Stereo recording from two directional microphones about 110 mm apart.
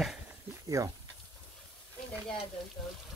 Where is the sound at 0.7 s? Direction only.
30° right (ahead or behind).